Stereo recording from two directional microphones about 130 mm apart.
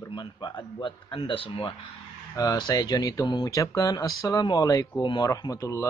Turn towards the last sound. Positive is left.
turn(degrees=25)  # may be behind; listen again after turning